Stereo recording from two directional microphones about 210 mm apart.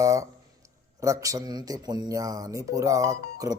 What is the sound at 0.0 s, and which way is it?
A man's voice, 15° right (ahead or behind).